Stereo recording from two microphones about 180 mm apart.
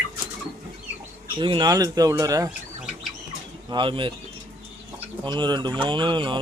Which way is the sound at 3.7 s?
25° right (ahead or behind).